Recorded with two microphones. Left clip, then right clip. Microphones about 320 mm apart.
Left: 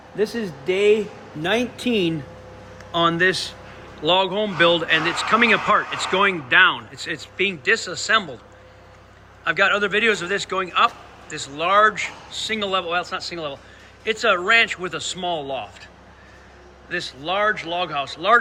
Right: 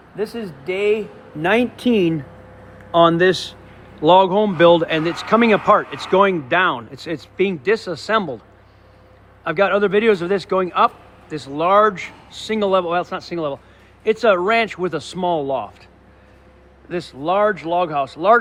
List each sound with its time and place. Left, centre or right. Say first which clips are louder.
0.2 s speech: left 2 dB; centre
1.4 s speech: right 5 dB; right
2.9 s speech: right 5 dB; centre
9.4 s speech: right 2 dB; centre
16.9 s speech: right 4 dB; centre